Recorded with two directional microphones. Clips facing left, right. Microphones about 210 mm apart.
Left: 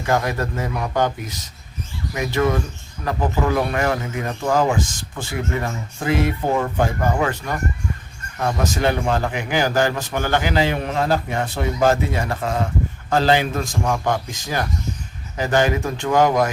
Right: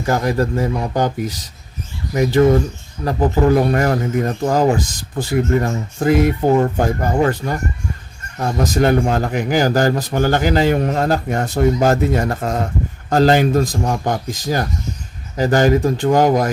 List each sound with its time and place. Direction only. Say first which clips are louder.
0.0 s speech: right 4 dB; 35° right (ahead or behind)
2.1 s speech: right 7 dB; 35° right (ahead or behind)